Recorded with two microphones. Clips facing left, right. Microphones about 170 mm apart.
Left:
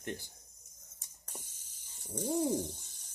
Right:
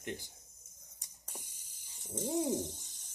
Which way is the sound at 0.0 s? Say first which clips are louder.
Left 1 dB; 15° right (ahead or behind).